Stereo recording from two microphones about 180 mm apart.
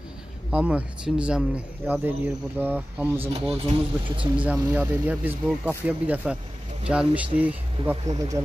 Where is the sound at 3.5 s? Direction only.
30° right (ahead or behind).